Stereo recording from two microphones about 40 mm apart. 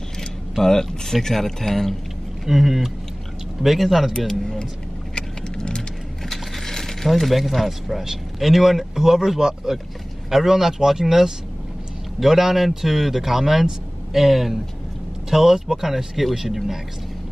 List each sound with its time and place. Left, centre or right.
0.2 s speech: centre
2.4 s speech: centre
5.1 s vehicle: centre
6.2 s a sound: centre
8.0 s speech: centre